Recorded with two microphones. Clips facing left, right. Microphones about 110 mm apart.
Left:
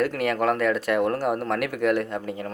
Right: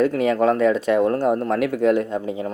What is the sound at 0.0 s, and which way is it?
A man's voice, 20° right (ahead or behind).